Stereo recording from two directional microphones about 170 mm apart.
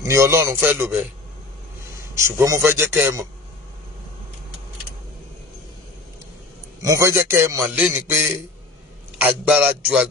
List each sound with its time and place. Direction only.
0.0 s a man's voice: 15° right (ahead or behind)
2.1 s a man's voice: 15° right (ahead or behind)
6.8 s a man's voice: 20° right (ahead or behind)
7.6 s a sound: centre (ahead or behind)
8.1 s a man's voice: 15° right (ahead or behind)